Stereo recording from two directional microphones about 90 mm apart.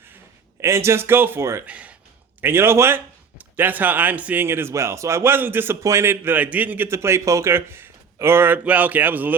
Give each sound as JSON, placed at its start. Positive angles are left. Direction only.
{"t": 0.6, "sound": "a man's voice", "side_deg": -30}
{"t": 1.6, "sound": "speech", "side_deg": -15}
{"t": 2.4, "sound": "a man's voice", "side_deg": -25}